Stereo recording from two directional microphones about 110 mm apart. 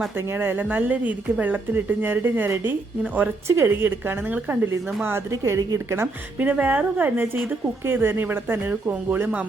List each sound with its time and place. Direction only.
0.3 s speech: 15° right (ahead or behind)
6.4 s speech: 15° right (ahead or behind)